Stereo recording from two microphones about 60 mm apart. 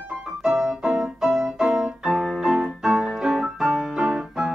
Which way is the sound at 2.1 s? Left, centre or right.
Centre.